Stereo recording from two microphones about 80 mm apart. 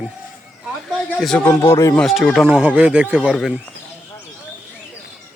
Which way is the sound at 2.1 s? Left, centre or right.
Centre.